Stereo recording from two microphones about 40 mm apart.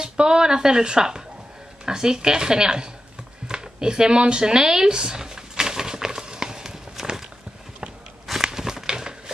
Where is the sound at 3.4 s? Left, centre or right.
Right.